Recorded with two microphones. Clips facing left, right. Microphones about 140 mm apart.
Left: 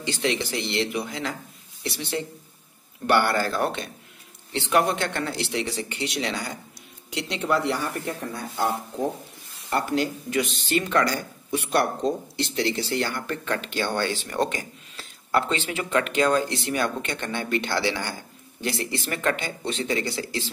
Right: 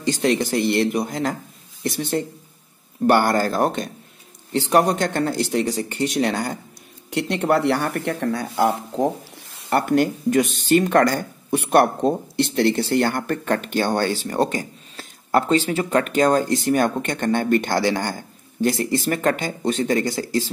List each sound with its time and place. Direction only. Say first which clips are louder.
0.0 s speech: right 6 dB; 45° right (ahead or behind); by 9.0 s 85° right
9.7 s speech: right 6 dB; 60° right (ahead or behind); by 20.4 s 45° right (ahead or behind)